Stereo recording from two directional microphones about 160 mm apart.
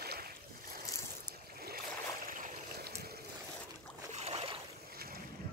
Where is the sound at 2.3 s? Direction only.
65° right (ahead or behind).